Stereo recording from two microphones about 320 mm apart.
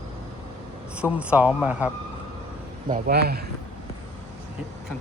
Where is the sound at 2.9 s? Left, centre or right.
Right.